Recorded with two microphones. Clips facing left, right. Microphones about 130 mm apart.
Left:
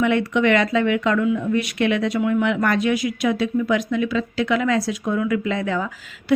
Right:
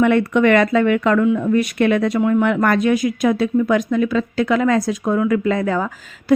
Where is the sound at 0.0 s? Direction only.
50° right (ahead or behind).